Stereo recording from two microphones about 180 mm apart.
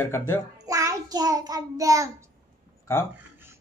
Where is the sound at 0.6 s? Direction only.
20° right (ahead or behind).